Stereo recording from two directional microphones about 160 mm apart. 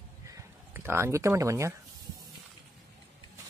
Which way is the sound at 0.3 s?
15° right (ahead or behind).